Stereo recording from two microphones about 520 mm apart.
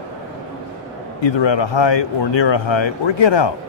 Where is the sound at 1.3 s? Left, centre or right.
Left.